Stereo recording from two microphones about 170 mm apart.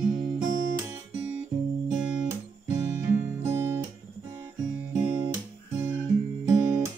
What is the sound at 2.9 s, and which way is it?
Music, 15° right (ahead or behind).